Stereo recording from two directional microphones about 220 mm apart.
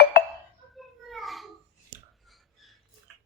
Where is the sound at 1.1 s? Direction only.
Centre (ahead or behind).